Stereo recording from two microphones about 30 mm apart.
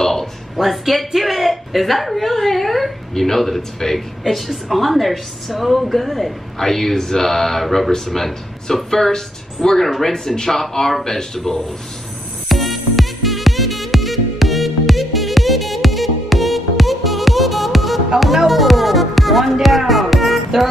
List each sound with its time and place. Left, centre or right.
0.6 s a woman's voice: centre
12.4 s music: centre